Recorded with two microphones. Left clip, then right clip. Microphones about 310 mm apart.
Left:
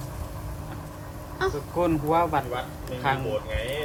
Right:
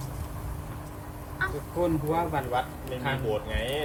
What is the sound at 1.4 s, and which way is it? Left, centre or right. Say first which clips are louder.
Speech: left 3 dB; centre.